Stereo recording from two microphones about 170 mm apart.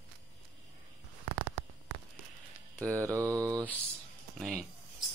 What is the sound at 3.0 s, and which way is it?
Speech, 20° right (ahead or behind).